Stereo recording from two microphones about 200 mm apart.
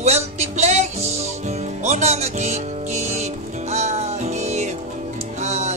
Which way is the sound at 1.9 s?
35° right (ahead or behind).